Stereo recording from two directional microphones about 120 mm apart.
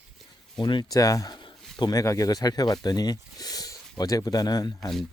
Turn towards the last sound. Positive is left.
turn(degrees=35)  # may be behind; listen again after turning